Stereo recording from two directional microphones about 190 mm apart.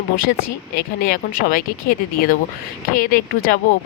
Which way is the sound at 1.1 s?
50° left (ahead or behind).